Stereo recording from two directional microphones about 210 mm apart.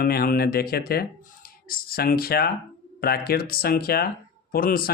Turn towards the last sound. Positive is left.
turn(degrees=45)  # may be behind; listen again after turning